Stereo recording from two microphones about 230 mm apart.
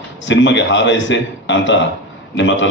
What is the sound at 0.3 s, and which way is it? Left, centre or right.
A man's voice, left.